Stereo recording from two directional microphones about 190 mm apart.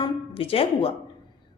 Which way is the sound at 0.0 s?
30° left (ahead or behind).